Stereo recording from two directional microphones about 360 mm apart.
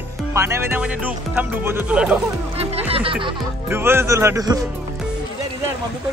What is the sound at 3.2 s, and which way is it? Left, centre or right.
Speech, centre.